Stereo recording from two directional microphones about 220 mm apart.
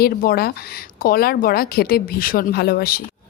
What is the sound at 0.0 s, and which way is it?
A woman's voice, 45° left (ahead or behind).